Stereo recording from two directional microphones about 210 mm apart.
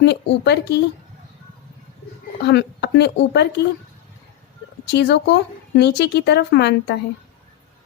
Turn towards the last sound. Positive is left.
turn(degrees=50)  # may be behind; listen again after turning